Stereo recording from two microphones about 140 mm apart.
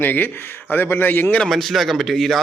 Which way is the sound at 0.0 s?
15° left (ahead or behind).